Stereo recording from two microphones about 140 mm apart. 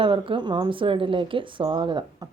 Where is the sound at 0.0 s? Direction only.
40° right (ahead or behind).